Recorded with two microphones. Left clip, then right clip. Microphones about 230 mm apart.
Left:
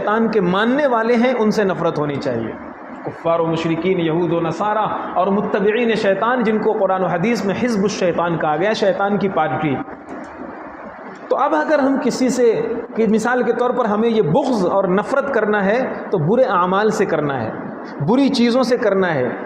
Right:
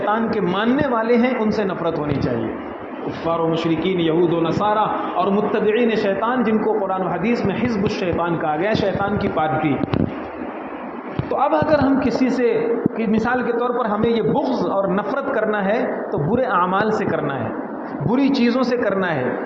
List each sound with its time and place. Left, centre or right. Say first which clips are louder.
0.0 s a man's voice: left 3 dB; left
3.2 s a man's voice: left 2 dB; left
11.3 s a man's voice: left 1 dB; left